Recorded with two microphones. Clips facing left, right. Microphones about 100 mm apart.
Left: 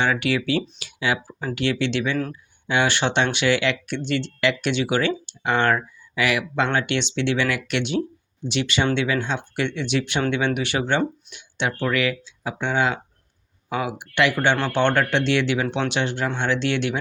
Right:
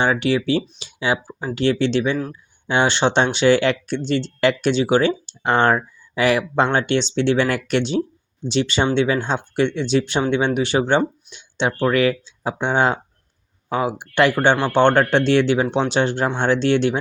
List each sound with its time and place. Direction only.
0.0 s speech: 30° right (ahead or behind)